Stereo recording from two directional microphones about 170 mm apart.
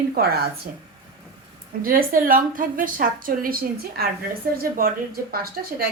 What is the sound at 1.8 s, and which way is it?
A woman's voice, 55° right (ahead or behind).